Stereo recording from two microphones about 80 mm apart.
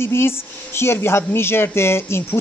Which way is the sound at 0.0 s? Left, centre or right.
Left.